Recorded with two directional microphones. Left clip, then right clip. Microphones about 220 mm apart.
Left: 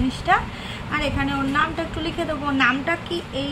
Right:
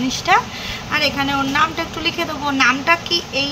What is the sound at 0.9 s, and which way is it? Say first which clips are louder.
A woman's voice: right 6 dB; 15° left (ahead or behind).